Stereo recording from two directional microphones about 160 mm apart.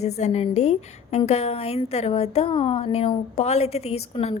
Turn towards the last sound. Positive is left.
turn(degrees=40)  # may be behind; listen again after turning